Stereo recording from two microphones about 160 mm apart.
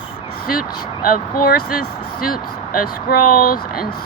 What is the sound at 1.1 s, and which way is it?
Speech, 60° left (ahead or behind).